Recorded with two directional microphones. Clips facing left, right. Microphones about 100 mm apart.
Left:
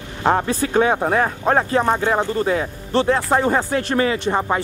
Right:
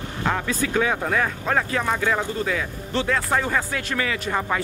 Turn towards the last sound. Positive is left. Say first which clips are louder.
# left 5 dB
turn(degrees=25)  # may be behind; listen again after turning